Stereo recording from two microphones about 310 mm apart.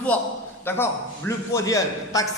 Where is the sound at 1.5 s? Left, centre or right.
Centre.